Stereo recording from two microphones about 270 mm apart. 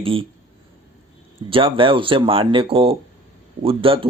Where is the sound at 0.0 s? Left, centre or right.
Centre.